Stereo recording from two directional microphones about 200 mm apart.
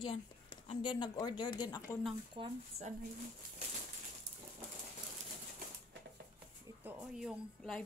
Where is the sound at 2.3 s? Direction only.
25° right (ahead or behind).